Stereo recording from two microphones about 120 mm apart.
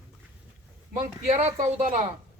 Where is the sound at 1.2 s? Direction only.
70° right (ahead or behind).